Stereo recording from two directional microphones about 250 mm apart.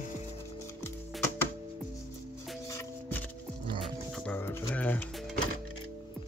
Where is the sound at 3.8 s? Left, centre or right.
Centre.